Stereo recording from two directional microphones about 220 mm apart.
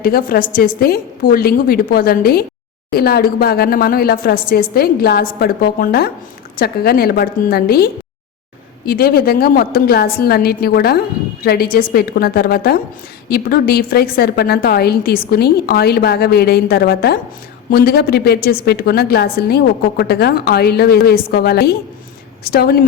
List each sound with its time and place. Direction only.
0.0 s a woman's voice: 40° left (ahead or behind)
8.9 s a woman's voice: 45° left (ahead or behind)